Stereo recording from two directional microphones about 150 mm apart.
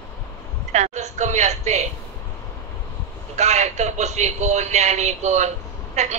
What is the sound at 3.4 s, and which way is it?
A man's voice, 50° right (ahead or behind).